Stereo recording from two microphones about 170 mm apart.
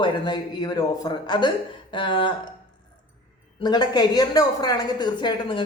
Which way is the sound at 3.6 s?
25° left (ahead or behind).